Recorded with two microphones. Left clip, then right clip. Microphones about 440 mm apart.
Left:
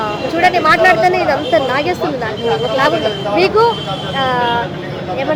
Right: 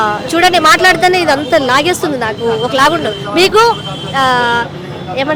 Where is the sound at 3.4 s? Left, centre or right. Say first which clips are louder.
Right 4 dB; right.